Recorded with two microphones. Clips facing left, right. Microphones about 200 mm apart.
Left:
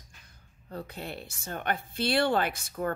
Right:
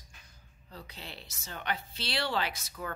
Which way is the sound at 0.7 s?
55° left (ahead or behind).